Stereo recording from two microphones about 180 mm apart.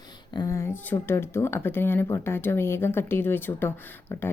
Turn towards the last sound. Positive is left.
turn(degrees=10)  # may be behind; listen again after turning